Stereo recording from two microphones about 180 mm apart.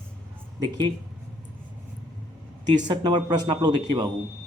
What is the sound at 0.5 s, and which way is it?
Speech, 25° right (ahead or behind).